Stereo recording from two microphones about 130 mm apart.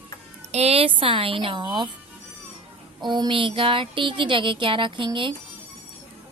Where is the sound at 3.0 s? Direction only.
35° right (ahead or behind).